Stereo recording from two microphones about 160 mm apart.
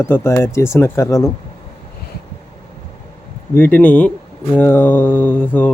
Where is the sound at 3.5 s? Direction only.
10° left (ahead or behind).